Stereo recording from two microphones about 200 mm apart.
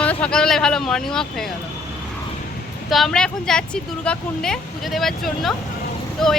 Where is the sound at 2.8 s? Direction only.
Centre (ahead or behind).